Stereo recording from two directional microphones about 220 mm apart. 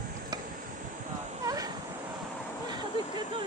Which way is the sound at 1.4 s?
15° right (ahead or behind).